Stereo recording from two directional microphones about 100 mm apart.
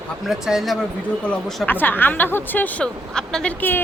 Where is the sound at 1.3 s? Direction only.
10° left (ahead or behind).